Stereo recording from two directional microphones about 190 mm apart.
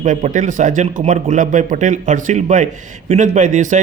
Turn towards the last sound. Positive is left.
turn(degrees=-40)  # may be behind; listen again after turning